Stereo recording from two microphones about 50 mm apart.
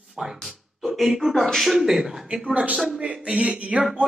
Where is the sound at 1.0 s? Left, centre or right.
Centre.